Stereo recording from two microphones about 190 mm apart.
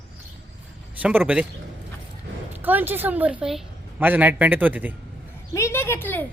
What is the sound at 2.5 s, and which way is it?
A woman's voice, 10° right (ahead or behind).